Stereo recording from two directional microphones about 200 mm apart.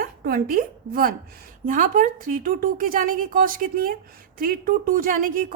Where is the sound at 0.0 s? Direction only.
50° right (ahead or behind).